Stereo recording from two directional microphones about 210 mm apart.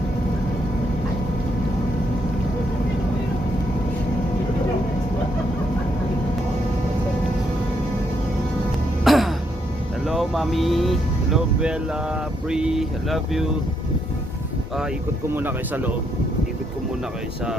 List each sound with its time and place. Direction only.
9.0 s music: centre (ahead or behind)
10.1 s speech: centre (ahead or behind)
15.4 s speech: 10° right (ahead or behind)